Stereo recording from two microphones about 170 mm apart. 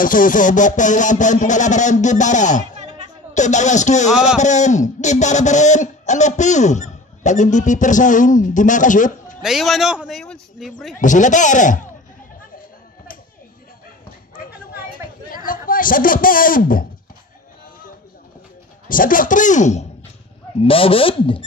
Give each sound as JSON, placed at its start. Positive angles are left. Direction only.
{"t": 0.0, "sound": "speech", "side_deg": 50}
{"t": 9.4, "sound": "speech", "side_deg": 0}
{"t": 11.0, "sound": "speech", "side_deg": 50}
{"t": 15.2, "sound": "a man's voice", "side_deg": 55}
{"t": 18.9, "sound": "speech", "side_deg": 55}
{"t": 20.6, "sound": "speech", "side_deg": 30}